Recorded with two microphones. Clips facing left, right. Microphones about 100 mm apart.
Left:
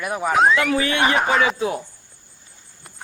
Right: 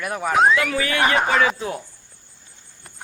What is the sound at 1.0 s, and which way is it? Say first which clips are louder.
Speech: right 1 dB; centre (ahead or behind).